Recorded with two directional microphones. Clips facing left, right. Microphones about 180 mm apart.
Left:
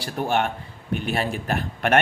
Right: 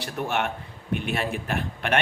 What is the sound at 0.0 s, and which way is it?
A man's voice, 35° left (ahead or behind).